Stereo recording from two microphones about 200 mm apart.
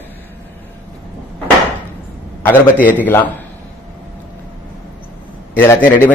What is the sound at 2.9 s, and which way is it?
Speech, 10° left (ahead or behind).